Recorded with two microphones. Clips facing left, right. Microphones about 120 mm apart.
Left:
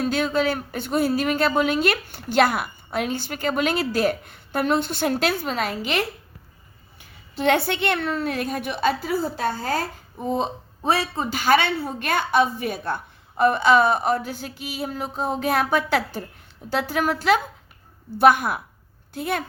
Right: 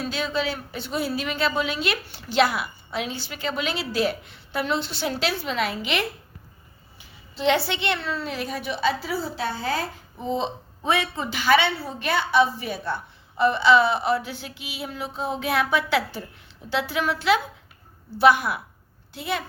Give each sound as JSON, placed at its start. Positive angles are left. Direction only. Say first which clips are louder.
{"t": 0.0, "sound": "speech", "louder": "left 5 dB", "side_deg": 50}
{"t": 7.0, "sound": "speech", "louder": "left 1 dB", "side_deg": 55}